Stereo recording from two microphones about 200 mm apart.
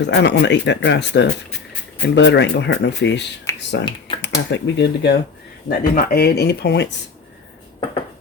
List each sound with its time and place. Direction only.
0.0 s speech: 60° left (ahead or behind)
5.6 s speech: 50° left (ahead or behind)